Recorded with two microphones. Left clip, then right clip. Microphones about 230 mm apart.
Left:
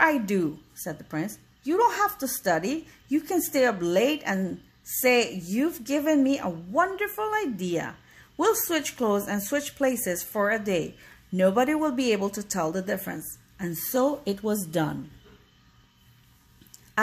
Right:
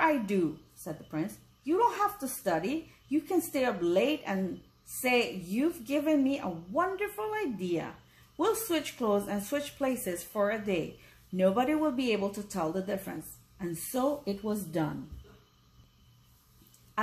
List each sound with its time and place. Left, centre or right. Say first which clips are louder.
0.0 s a woman's voice: left 5 dB; left